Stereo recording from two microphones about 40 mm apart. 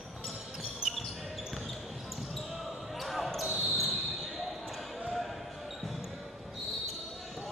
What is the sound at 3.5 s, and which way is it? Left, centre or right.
Basketball bounce, centre.